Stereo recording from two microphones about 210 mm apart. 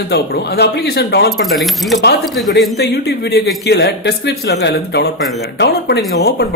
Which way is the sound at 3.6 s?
50° left (ahead or behind).